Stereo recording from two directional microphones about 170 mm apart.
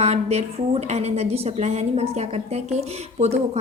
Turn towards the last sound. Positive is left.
turn(degrees=-40)  # may be behind; listen again after turning